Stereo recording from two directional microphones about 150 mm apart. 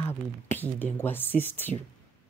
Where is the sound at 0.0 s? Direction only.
15° left (ahead or behind).